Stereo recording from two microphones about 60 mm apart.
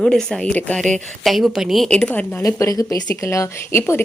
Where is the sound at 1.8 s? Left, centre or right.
Centre.